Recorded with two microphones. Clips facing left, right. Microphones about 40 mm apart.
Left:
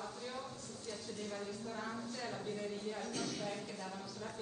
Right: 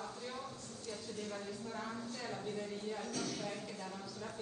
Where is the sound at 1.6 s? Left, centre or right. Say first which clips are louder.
Even; centre.